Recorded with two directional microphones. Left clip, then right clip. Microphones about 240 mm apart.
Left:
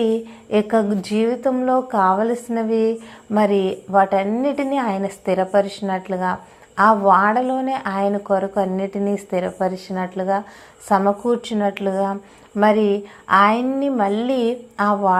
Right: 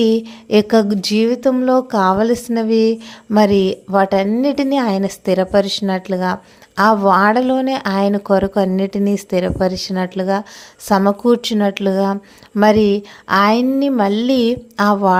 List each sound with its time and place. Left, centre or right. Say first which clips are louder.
0.0 s a woman's voice: right 4 dB; right